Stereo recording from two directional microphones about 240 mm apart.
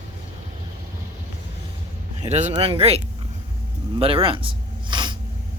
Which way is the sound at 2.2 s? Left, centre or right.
Right.